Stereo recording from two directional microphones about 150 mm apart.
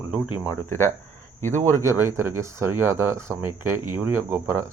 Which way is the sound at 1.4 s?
55° right (ahead or behind).